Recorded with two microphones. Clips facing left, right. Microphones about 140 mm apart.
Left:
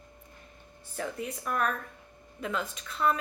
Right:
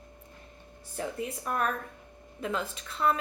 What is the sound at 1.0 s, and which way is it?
A woman's voice, 30° right (ahead or behind).